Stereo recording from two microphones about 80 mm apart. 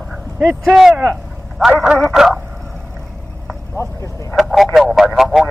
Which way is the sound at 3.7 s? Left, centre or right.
Left.